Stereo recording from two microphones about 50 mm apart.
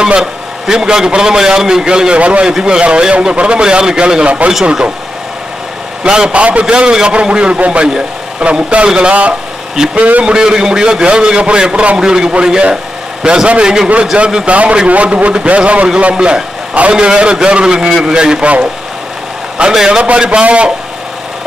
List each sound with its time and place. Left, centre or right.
0.0 s a man's voice: centre
6.0 s a man's voice: centre
7.9 s a man's voice: centre; by 10.2 s right
10.2 s a man's voice: centre
19.6 s a man's voice: centre